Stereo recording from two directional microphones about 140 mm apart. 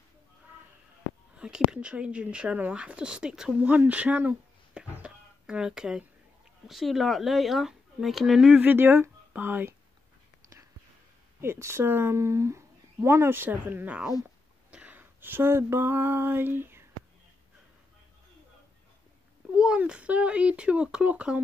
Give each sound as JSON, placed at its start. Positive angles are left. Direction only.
{"t": 1.3, "sound": "speech", "side_deg": -5}
{"t": 11.4, "sound": "speech", "side_deg": -20}
{"t": 14.7, "sound": "a sound", "side_deg": -10}
{"t": 19.5, "sound": "speech", "side_deg": -5}